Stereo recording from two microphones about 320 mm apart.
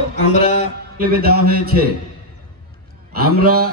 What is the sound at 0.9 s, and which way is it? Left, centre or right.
Speech, right.